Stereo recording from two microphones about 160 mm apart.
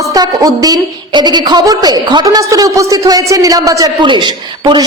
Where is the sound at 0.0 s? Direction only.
25° right (ahead or behind).